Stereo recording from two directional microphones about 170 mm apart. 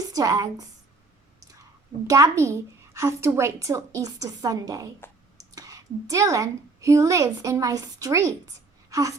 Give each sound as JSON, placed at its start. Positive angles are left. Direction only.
{"t": 0.1, "sound": "a woman's voice", "side_deg": -20}
{"t": 2.0, "sound": "a woman's voice", "side_deg": -20}